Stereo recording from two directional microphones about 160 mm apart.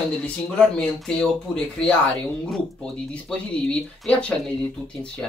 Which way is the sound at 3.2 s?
5° left (ahead or behind).